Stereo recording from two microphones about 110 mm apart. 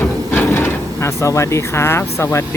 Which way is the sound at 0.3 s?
20° left (ahead or behind).